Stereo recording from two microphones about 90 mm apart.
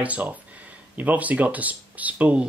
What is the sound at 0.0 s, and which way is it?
Speech, 15° right (ahead or behind).